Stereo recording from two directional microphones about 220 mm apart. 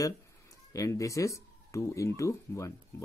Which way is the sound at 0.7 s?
15° left (ahead or behind).